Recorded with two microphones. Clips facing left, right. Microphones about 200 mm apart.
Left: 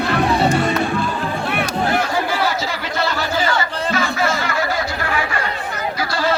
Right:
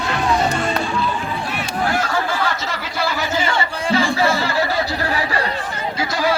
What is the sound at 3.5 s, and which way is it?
Chatter, 30° right (ahead or behind).